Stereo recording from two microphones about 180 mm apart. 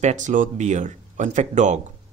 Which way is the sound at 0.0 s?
40° right (ahead or behind).